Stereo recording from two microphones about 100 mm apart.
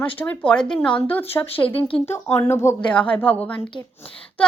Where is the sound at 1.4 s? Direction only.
30° left (ahead or behind).